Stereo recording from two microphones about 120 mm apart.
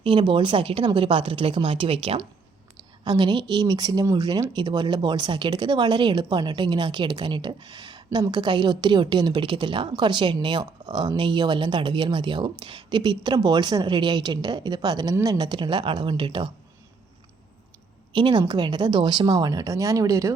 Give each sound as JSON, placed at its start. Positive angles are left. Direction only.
{"t": 0.0, "sound": "a woman's voice", "side_deg": -45}
{"t": 3.0, "sound": "speech", "side_deg": -35}
{"t": 18.1, "sound": "speech", "side_deg": -40}